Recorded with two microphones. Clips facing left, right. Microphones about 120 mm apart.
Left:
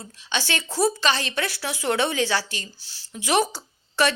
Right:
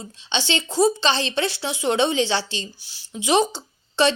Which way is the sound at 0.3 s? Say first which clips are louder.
Right 3 dB; 25° right (ahead or behind).